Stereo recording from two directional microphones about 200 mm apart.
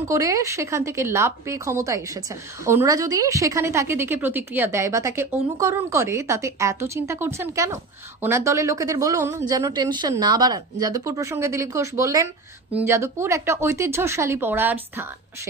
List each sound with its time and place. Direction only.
0.1 s a woman's voice: 15° right (ahead or behind)